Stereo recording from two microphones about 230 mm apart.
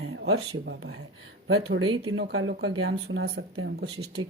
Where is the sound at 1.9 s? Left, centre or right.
Right.